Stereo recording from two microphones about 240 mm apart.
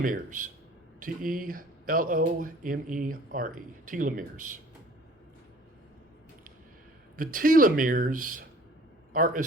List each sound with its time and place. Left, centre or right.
0.0 s speech: right
7.2 s speech: right